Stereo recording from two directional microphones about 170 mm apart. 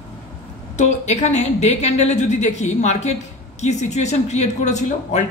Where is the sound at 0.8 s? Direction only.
40° left (ahead or behind).